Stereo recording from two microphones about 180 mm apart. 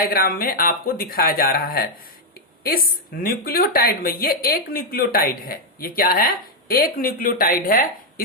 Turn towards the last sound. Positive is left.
turn(degrees=55)  # may be behind; listen again after turning